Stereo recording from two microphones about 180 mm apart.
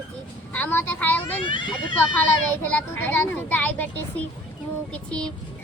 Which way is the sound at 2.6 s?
10° left (ahead or behind).